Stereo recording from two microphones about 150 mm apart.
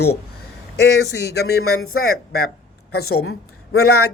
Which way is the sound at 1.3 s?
90° left.